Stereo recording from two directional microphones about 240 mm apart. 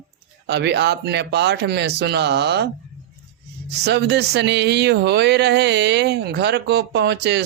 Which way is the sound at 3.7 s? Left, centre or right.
Right.